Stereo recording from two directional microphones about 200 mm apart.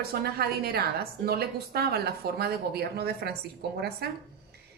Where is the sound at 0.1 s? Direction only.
50° right (ahead or behind).